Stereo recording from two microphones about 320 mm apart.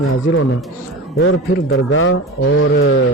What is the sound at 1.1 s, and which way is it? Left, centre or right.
A man's voice, left.